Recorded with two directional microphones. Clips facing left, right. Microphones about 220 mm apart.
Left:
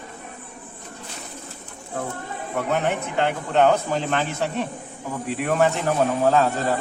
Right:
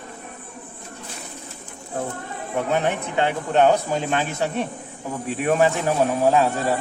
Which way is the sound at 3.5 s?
10° right (ahead or behind).